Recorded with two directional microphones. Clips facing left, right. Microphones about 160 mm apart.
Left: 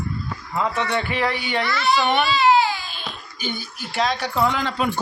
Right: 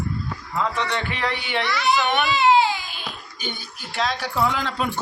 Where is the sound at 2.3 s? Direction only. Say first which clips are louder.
Right 3 dB; 20° right (ahead or behind).